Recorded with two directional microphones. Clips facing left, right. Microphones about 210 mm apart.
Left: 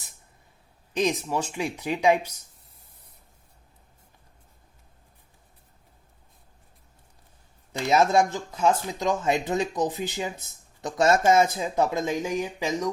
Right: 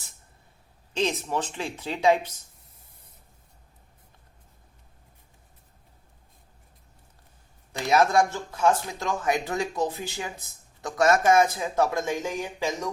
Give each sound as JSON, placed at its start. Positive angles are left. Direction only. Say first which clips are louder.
{"t": 0.9, "sound": "speech", "louder": "left 2 dB", "side_deg": 15}
{"t": 7.7, "sound": "speech", "louder": "left 1 dB", "side_deg": 20}